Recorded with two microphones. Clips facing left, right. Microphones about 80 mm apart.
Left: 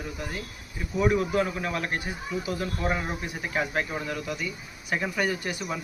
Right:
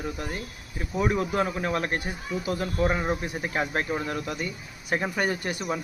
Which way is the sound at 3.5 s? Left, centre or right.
Right.